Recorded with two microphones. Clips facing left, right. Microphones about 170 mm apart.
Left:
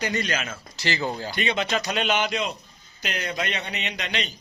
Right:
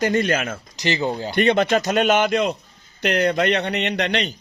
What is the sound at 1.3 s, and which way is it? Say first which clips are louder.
A man's voice: right 11 dB; 55° right (ahead or behind).